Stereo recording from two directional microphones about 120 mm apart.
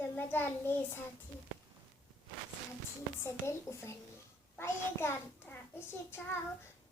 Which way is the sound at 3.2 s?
25° left (ahead or behind).